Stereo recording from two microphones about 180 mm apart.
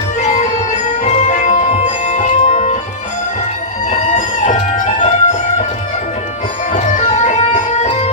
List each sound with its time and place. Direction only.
0.3 s music: 40° left (ahead or behind)
3.8 s music: 45° left (ahead or behind)
6.7 s music: 40° left (ahead or behind)